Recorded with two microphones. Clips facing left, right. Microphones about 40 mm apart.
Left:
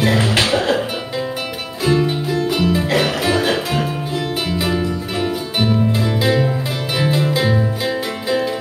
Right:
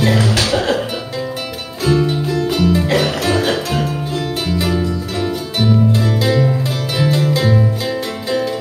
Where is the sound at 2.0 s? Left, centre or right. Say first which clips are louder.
Right 1 dB; centre.